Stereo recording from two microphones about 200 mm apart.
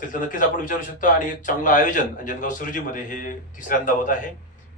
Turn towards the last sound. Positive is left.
turn(degrees=40)  # may be behind; listen again after turning